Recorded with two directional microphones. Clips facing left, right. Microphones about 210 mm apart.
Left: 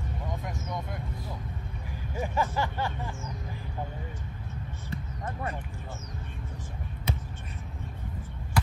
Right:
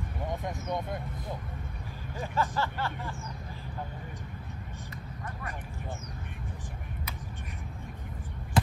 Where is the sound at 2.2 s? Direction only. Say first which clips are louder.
Left 2 dB; 15° left (ahead or behind).